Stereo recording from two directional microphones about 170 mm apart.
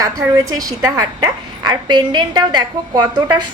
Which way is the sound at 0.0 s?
20° right (ahead or behind).